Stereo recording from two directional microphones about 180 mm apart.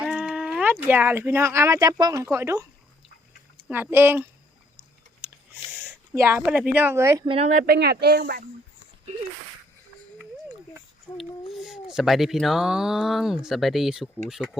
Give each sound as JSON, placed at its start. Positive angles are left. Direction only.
{"t": 0.0, "sound": "speech", "side_deg": -5}
{"t": 3.7, "sound": "speech", "side_deg": -10}
{"t": 5.7, "sound": "speech", "side_deg": -10}
{"t": 7.3, "sound": "speech", "side_deg": -35}
{"t": 7.5, "sound": "speech", "side_deg": -60}
{"t": 11.1, "sound": "speech", "side_deg": 10}